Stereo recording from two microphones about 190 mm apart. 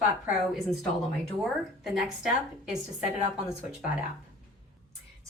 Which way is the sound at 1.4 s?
Centre (ahead or behind).